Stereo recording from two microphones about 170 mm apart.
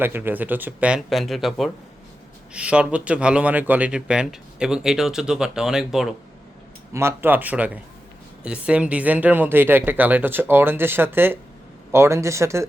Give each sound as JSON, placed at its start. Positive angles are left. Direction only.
{"t": 0.0, "sound": "speech", "side_deg": -10}
{"t": 6.9, "sound": "speech", "side_deg": -15}